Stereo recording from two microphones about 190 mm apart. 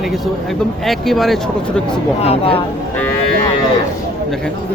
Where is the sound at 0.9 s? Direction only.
Centre (ahead or behind).